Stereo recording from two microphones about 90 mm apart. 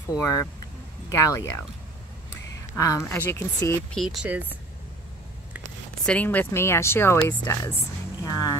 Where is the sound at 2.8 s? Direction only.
35° left (ahead or behind).